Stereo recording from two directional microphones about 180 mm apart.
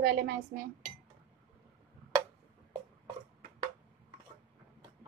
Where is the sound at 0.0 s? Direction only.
55° right (ahead or behind).